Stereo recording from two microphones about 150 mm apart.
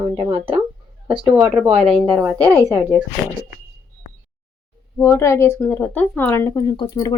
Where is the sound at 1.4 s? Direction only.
10° right (ahead or behind).